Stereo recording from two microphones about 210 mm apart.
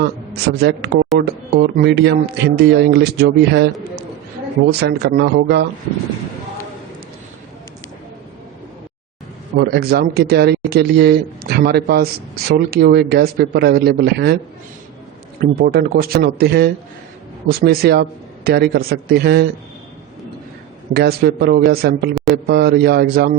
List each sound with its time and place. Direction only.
0.4 s speech: 50° right (ahead or behind)
4.8 s speech: 50° right (ahead or behind)
9.6 s speech: 50° right (ahead or behind)
15.4 s speech: 45° right (ahead or behind)
20.9 s speech: 50° right (ahead or behind)